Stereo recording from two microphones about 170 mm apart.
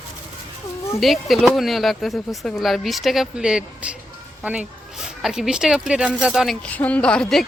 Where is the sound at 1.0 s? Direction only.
Centre (ahead or behind).